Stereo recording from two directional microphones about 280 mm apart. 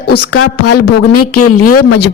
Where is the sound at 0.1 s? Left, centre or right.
Left.